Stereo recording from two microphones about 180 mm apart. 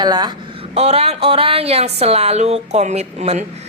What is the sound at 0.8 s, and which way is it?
A woman's voice, 35° right (ahead or behind).